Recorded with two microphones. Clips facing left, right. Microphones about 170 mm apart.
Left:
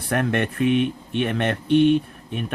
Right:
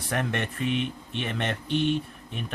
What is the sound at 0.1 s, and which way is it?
Speech, 55° left (ahead or behind).